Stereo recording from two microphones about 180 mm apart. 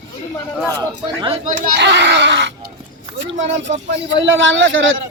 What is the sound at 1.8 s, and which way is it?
A man's voice, 75° right (ahead or behind).